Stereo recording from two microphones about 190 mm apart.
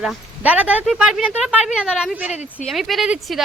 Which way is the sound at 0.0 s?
5° right (ahead or behind).